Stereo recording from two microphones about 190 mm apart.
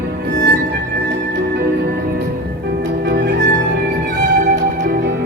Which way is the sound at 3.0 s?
65° right (ahead or behind).